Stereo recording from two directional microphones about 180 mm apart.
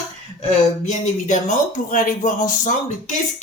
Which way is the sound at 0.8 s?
40° left (ahead or behind).